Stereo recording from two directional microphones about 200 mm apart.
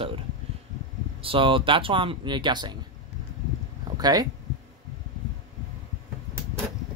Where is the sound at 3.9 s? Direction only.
20° right (ahead or behind).